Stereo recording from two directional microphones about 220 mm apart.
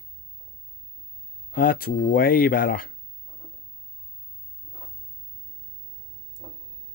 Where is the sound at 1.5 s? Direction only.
40° left (ahead or behind).